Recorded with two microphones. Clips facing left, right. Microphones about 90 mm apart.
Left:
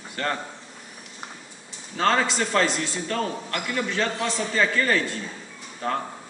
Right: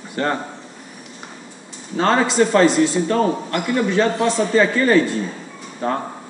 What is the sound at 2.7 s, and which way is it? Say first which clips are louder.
Speech: right 12 dB; 10° right (ahead or behind).